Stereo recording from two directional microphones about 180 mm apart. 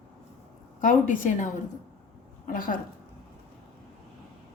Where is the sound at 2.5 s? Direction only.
50° left (ahead or behind).